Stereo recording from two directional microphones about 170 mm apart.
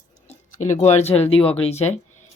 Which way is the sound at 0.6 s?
45° left (ahead or behind).